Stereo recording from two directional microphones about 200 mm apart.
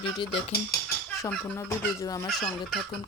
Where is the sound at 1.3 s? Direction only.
10° left (ahead or behind).